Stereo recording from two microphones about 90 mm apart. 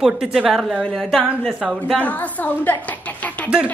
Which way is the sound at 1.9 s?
15° left (ahead or behind).